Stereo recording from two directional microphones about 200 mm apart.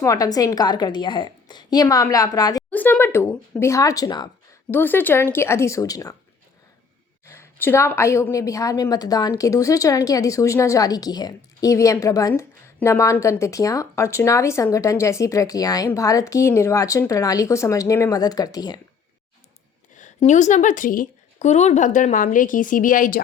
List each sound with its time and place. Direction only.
0.0 s a woman's voice: 15° left (ahead or behind)
2.6 s a woman's voice: 10° left (ahead or behind)
7.3 s a woman's voice: 10° left (ahead or behind)
20.0 s a woman's voice: 35° left (ahead or behind)